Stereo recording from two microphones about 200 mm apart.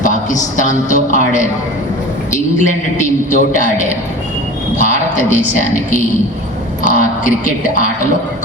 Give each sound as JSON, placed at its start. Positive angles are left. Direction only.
{"t": 0.0, "sound": "a man's voice", "side_deg": 40}